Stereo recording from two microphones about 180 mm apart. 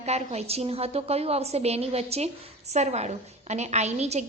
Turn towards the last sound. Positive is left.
turn(degrees=-35)  # may be behind; listen again after turning